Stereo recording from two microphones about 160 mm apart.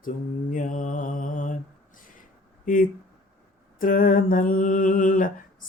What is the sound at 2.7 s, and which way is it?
Mantra, 60° left (ahead or behind).